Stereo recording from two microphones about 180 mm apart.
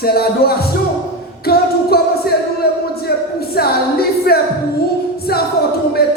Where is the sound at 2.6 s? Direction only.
60° left (ahead or behind).